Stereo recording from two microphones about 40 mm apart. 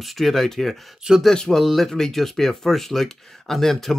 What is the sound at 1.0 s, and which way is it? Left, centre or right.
Speech, centre.